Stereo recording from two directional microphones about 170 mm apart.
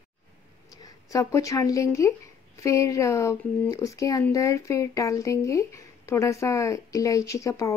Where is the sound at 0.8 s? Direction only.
20° left (ahead or behind).